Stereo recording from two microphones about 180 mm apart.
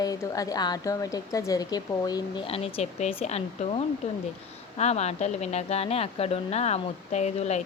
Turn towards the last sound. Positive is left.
turn(degrees=40)  # may be behind; listen again after turning